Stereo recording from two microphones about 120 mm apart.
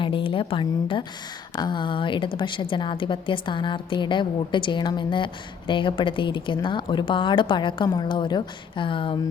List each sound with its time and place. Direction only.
0.0 s a woman's voice: 45° left (ahead or behind)